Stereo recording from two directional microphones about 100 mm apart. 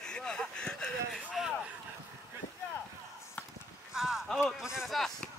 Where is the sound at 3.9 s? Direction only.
5° right (ahead or behind).